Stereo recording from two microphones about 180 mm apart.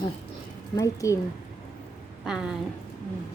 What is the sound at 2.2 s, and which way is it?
Speech, 5° right (ahead or behind).